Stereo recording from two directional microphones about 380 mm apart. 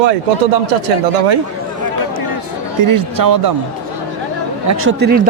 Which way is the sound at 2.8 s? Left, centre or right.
Right.